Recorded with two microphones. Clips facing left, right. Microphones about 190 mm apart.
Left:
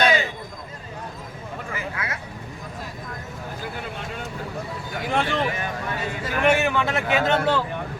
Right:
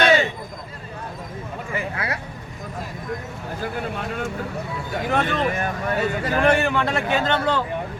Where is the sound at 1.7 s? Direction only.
30° right (ahead or behind).